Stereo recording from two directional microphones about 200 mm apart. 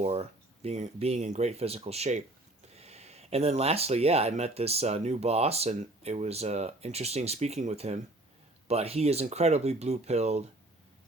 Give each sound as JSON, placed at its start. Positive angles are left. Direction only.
{"t": 0.0, "sound": "speech", "side_deg": -30}